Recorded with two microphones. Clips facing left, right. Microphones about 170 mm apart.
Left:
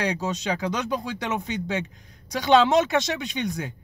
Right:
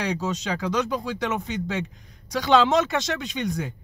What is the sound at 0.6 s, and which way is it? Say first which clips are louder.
Speech: right 2 dB; centre (ahead or behind).